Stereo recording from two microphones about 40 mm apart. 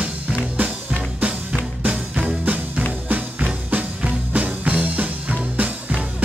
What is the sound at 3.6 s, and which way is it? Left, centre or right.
Music, right.